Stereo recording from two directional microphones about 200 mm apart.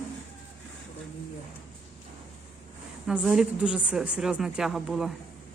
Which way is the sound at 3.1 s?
5° right (ahead or behind).